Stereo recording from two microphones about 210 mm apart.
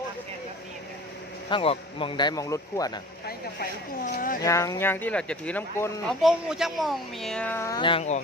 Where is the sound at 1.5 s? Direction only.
25° left (ahead or behind).